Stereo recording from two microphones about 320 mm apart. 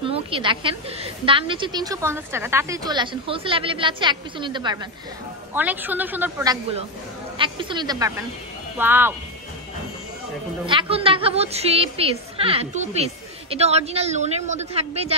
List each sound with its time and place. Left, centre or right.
0.0 s a woman's voice: centre
10.7 s a woman's voice: centre